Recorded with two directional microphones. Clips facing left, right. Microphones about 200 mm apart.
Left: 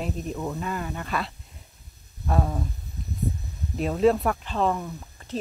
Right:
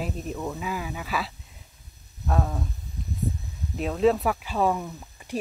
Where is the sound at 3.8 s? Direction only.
Centre (ahead or behind).